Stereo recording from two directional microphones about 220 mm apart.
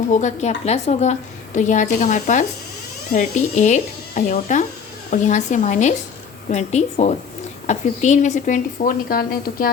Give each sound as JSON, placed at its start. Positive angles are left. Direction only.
{"t": 0.1, "sound": "speech", "side_deg": 35}